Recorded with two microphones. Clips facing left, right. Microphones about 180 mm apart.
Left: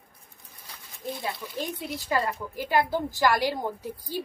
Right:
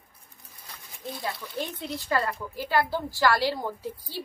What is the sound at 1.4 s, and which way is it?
A woman's voice, 10° left (ahead or behind).